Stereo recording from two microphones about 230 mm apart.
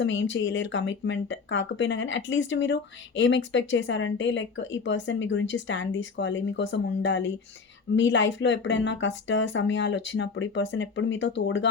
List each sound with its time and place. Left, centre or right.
0.0 s speech: left